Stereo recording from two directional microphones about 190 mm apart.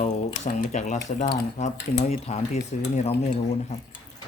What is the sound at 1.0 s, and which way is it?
Speech, 40° left (ahead or behind).